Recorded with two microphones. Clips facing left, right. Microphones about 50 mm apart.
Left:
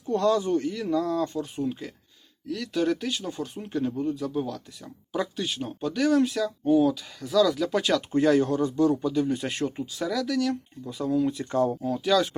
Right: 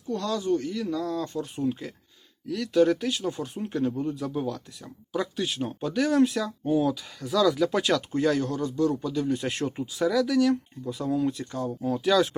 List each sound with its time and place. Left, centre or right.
0.1 s speech: left; by 8.0 s centre
8.1 s speech: centre
11.5 s speech: left
11.8 s speech: centre